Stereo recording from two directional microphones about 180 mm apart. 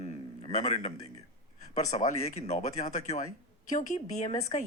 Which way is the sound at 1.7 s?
40° left (ahead or behind).